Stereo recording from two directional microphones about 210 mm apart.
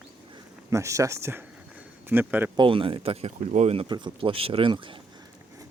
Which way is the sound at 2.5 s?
25° right (ahead or behind).